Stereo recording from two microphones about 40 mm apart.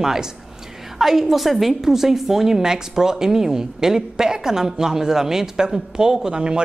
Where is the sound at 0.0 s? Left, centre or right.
Centre.